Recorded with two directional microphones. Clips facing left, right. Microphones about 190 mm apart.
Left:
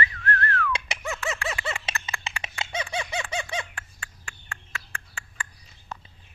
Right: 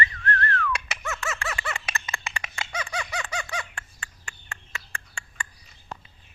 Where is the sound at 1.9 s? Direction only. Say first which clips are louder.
Even; 25° left (ahead or behind).